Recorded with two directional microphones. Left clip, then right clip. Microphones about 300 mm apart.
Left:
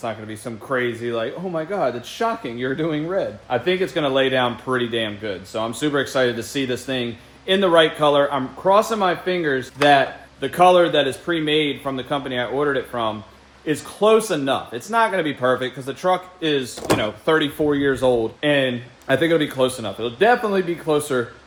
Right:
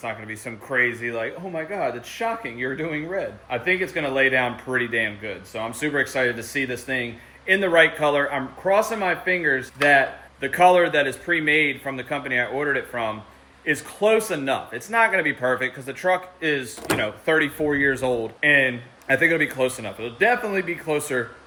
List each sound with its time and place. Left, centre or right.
0.0 s speech: centre
16.8 s speech: left
17.3 s speech: centre